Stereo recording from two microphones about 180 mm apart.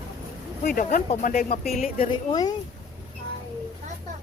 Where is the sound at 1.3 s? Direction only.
55° left (ahead or behind).